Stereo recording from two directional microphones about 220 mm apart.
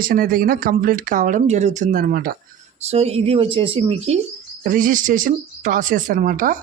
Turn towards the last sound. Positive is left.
turn(degrees=-40)  # may be behind; listen again after turning